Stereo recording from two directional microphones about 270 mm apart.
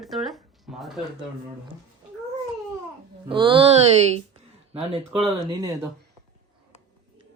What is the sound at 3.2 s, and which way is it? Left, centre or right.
Speech, centre.